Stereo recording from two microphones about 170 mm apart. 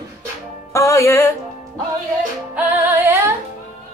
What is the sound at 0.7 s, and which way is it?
Music, 15° left (ahead or behind).